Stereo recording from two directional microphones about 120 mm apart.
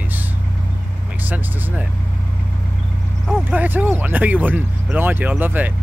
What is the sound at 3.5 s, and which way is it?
Speech, 15° right (ahead or behind).